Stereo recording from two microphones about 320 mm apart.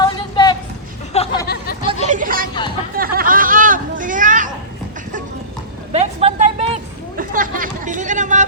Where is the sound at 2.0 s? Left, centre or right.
Right.